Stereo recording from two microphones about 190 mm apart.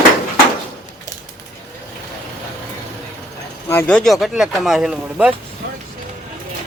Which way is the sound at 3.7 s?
10° left (ahead or behind).